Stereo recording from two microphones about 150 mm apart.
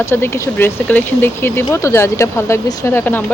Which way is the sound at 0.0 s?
15° left (ahead or behind).